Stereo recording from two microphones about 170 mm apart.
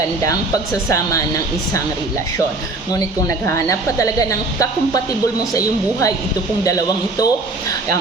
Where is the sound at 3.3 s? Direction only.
20° left (ahead or behind).